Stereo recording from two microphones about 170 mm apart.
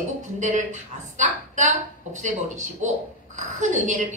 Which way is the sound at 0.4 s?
45° right (ahead or behind).